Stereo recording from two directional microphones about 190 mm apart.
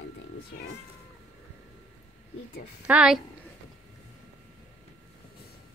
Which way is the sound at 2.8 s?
5° right (ahead or behind).